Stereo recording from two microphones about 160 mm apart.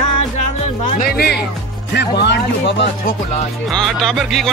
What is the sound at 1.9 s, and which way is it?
Speech, 90° left.